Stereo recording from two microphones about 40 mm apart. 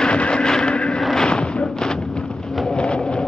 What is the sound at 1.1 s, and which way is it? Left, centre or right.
Artillery fire, left.